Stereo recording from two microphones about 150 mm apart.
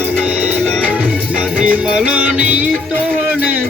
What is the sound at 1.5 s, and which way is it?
Music, 5° right (ahead or behind).